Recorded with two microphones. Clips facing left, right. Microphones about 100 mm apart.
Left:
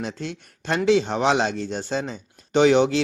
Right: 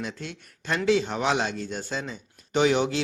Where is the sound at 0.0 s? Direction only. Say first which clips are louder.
Left 4 dB; 30° left (ahead or behind).